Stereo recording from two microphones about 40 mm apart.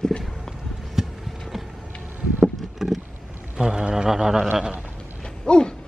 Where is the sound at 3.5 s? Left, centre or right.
Right.